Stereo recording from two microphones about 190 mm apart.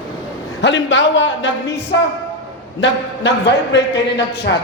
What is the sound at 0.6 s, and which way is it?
Speech, 70° left (ahead or behind).